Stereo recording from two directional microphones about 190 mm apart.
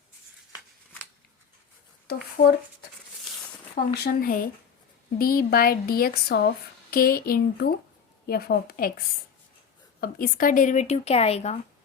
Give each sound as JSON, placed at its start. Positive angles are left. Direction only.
{"t": 2.1, "sound": "speech", "side_deg": 55}
{"t": 4.0, "sound": "speech", "side_deg": 50}